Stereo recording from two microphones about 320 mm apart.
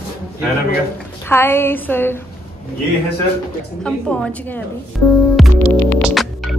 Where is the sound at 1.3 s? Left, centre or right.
Centre.